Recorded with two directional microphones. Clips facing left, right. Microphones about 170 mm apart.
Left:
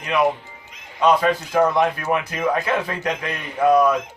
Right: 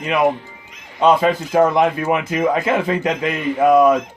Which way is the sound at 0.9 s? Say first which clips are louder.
Right 3 dB; 25° right (ahead or behind).